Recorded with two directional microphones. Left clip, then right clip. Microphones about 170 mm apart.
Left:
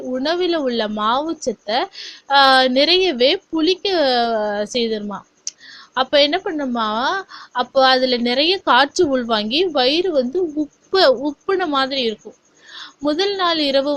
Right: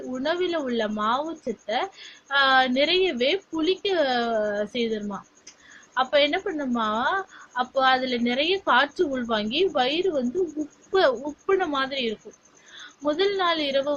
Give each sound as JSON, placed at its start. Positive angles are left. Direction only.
{"t": 0.1, "sound": "speech", "side_deg": 40}
{"t": 5.5, "sound": "a sound", "side_deg": 40}
{"t": 5.9, "sound": "a woman's voice", "side_deg": 45}